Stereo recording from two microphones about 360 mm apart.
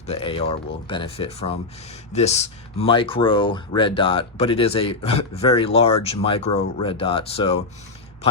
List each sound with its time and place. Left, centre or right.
0.1 s speech: centre